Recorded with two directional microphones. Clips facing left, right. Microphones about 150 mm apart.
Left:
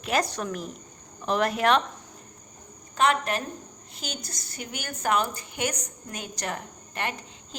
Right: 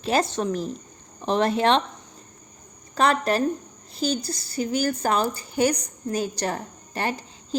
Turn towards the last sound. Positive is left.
turn(degrees=-35)  # may be behind; listen again after turning